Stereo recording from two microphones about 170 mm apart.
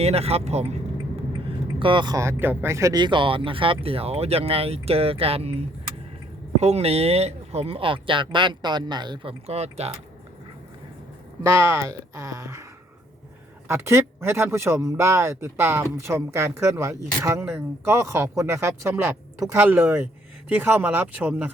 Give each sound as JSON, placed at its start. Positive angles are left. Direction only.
{"t": 0.0, "sound": "speech", "side_deg": -35}
{"t": 1.8, "sound": "speech", "side_deg": -30}
{"t": 11.8, "sound": "speech", "side_deg": -20}
{"t": 13.7, "sound": "speech", "side_deg": -15}